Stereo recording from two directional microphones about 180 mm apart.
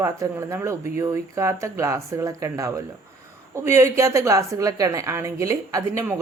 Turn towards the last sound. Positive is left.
turn(degrees=-15)  # may be behind; listen again after turning